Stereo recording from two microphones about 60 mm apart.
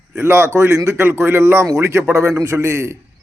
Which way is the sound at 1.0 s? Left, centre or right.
Right.